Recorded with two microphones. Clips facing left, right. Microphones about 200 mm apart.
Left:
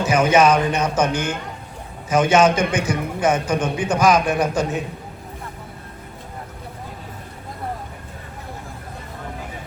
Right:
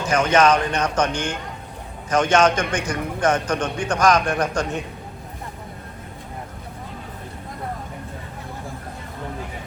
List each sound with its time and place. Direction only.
0.0 s a man's voice: 5° left (ahead or behind)